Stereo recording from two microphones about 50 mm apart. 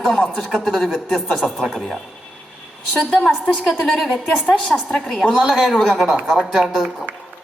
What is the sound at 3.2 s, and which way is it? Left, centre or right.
A woman's voice, centre.